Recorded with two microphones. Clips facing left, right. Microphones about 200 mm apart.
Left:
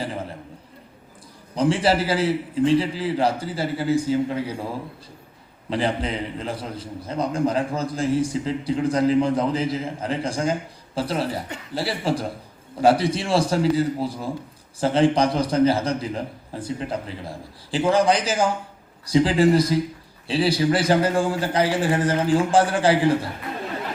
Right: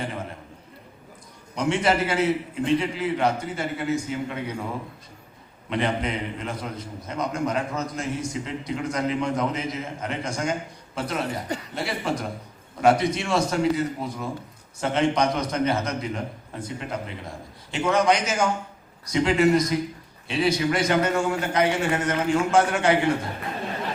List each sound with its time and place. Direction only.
1.5 s a man's voice: 30° left (ahead or behind)